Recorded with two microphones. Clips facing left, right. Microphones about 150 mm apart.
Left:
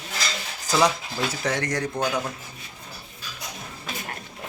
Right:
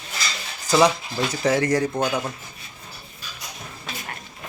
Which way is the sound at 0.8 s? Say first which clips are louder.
Right 2 dB; centre (ahead or behind).